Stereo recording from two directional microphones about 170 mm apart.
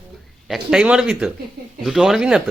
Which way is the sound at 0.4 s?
Centre (ahead or behind).